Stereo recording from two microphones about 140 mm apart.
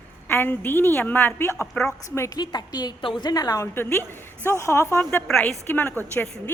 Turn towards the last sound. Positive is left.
turn(degrees=15)  # may be behind; listen again after turning